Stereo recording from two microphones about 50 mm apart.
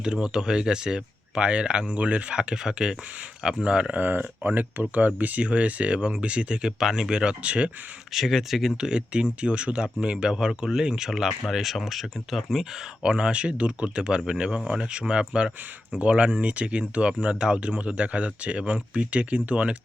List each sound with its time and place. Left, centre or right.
0.0 s speech: centre
3.9 s speech: right
8.1 s speech: centre
8.9 s speech: centre
13.0 s speech: centre